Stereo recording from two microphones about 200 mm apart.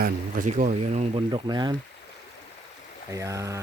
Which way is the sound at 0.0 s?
40° right (ahead or behind).